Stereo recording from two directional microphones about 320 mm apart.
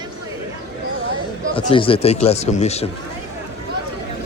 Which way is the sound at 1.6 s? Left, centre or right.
Centre.